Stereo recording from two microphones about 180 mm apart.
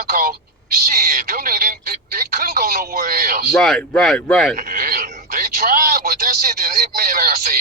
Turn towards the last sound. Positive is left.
turn(degrees=-55)  # may be behind; listen again after turning